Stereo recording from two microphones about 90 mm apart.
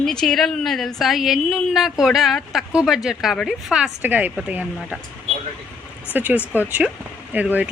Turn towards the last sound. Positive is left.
turn(degrees=-20)  # may be behind; listen again after turning